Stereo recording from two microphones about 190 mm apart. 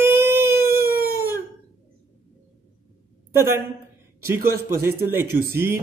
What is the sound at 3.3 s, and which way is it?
Speech, 15° right (ahead or behind).